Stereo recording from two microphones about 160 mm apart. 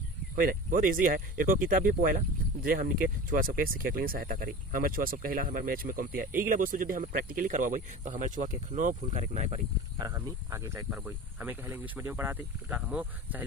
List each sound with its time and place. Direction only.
0.4 s speech: 60° right (ahead or behind); by 9.6 s 45° right (ahead or behind)
9.9 s speech: 20° right (ahead or behind)